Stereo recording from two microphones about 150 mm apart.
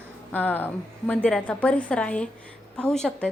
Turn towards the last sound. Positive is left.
turn(degrees=5)  # may be behind; listen again after turning